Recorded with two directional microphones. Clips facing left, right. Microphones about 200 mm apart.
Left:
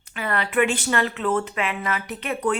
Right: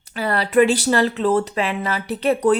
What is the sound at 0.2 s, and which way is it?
Speech, 35° right (ahead or behind).